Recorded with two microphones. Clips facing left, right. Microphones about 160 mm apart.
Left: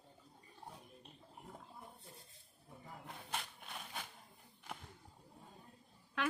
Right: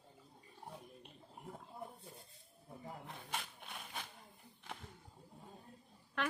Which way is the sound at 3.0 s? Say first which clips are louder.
Left 3 dB; centre (ahead or behind).